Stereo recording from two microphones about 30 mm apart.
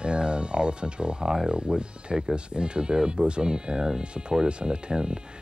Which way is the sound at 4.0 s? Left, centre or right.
Right.